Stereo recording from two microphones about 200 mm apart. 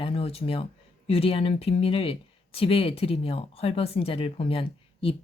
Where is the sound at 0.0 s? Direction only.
30° left (ahead or behind).